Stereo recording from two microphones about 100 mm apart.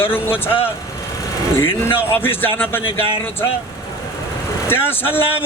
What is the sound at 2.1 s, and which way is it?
Speech, 20° left (ahead or behind).